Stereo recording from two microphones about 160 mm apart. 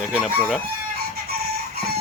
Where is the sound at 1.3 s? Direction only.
75° right (ahead or behind).